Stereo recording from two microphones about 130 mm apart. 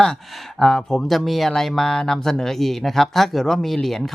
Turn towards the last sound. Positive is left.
turn(degrees=0)  # may be behind; listen again after turning